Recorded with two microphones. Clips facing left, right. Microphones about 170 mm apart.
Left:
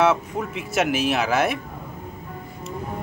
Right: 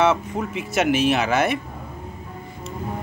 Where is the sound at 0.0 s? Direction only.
Centre (ahead or behind).